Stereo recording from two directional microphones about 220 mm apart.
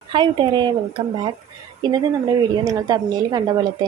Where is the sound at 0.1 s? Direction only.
20° right (ahead or behind).